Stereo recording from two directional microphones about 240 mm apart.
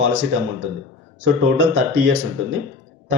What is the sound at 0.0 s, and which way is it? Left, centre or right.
Speech, right.